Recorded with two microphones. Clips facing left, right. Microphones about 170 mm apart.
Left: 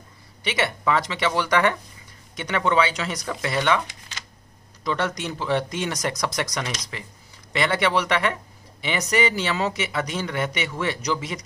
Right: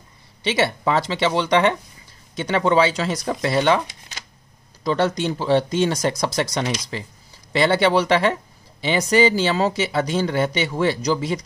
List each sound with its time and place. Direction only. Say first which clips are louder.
0.4 s speech: right 5 dB; 30° right (ahead or behind)
4.8 s speech: right 6 dB; 30° right (ahead or behind)